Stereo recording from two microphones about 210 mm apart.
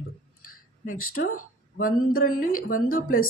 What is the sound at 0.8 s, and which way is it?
Speech, 40° left (ahead or behind).